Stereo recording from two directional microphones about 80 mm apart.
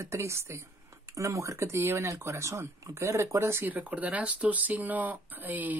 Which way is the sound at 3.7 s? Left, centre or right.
Centre.